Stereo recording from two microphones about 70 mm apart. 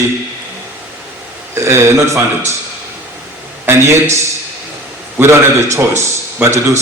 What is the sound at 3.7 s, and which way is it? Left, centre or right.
Speech, right.